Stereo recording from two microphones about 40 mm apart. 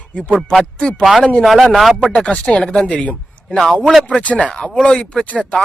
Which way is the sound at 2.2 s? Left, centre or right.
Left.